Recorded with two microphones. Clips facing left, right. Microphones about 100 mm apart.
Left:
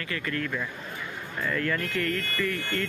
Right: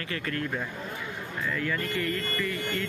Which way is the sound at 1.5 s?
10° right (ahead or behind).